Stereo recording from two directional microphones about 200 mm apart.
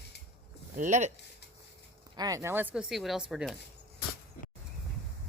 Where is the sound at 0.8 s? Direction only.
35° right (ahead or behind).